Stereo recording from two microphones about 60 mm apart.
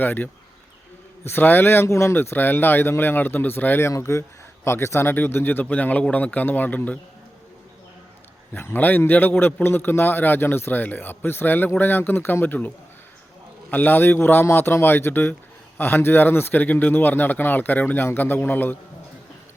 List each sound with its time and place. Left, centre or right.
0.0 s a man's voice: left
2.1 s a man's voice: left
3.8 s a man's voice: left
8.7 s a man's voice: left